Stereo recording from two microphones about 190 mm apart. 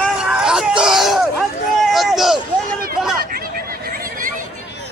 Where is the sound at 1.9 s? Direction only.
Centre (ahead or behind).